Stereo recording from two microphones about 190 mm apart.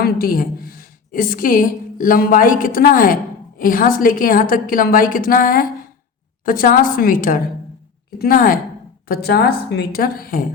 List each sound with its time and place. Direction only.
0.0 s a woman's voice: 50° left (ahead or behind)